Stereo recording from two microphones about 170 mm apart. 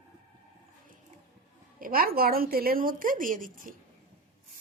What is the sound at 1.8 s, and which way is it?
A woman's voice, 60° right (ahead or behind).